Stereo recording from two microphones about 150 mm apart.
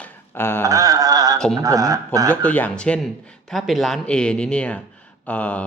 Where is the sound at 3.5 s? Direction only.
Centre (ahead or behind).